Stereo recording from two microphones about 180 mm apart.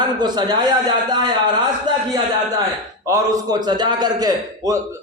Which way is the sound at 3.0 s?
20° right (ahead or behind).